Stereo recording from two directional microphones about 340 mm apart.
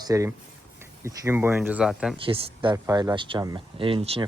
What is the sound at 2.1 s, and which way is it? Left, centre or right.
Speech, centre.